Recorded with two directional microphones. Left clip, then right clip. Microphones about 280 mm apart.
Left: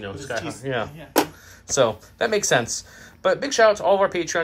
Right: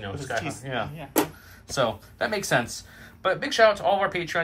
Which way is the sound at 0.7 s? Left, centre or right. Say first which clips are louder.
Left 4 dB; left.